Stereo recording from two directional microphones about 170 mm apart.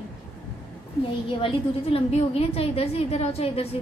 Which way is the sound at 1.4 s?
35° left (ahead or behind).